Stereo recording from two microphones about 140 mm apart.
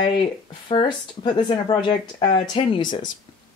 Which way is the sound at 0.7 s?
35° left (ahead or behind).